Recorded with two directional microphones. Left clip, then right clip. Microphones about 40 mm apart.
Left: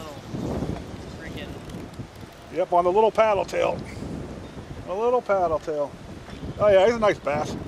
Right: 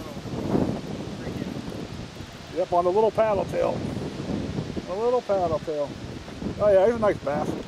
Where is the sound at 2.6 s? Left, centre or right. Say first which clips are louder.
Left 2 dB; right.